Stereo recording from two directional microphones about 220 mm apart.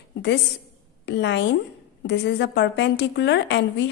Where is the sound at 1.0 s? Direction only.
50° left (ahead or behind).